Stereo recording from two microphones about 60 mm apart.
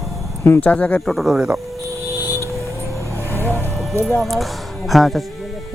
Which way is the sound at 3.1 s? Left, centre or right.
Left.